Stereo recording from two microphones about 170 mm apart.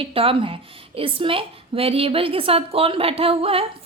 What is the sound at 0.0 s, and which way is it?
Speech, 35° right (ahead or behind).